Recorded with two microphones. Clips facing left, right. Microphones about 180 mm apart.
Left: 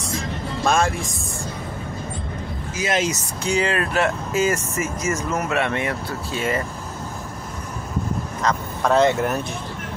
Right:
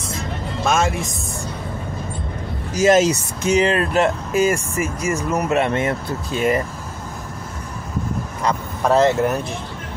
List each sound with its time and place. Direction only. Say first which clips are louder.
2.7 s speech: right 9 dB; 40° right (ahead or behind)
3.4 s speech: right 5 dB; 20° right (ahead or behind)
4.4 s speech: right 3 dB; 10° right (ahead or behind)
5.7 s speech: right 4 dB; 35° right (ahead or behind)
6.0 s speech: right 5 dB; 20° right (ahead or behind)
8.4 s speech: right 1 dB; 10° right (ahead or behind)